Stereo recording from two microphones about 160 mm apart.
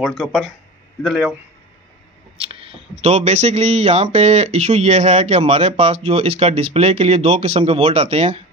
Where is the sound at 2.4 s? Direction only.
35° right (ahead or behind).